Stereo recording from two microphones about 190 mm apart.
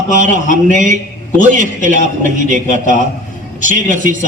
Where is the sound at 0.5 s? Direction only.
40° right (ahead or behind).